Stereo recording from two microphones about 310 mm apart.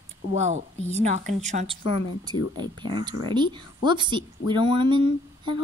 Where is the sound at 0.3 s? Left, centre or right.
Right.